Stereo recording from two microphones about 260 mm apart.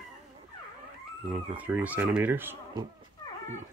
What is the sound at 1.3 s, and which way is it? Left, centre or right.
Speech, centre.